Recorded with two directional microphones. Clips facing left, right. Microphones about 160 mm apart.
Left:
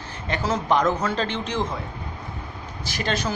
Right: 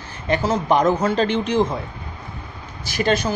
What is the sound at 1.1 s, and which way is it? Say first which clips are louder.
Speech: right 6 dB; 15° right (ahead or behind).